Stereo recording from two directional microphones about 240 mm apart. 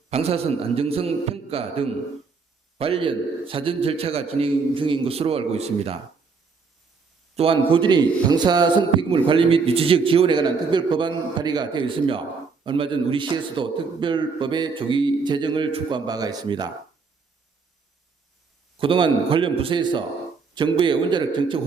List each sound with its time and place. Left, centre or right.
0.1 s a man's voice: right
7.3 s a man's voice: right
18.8 s a man's voice: right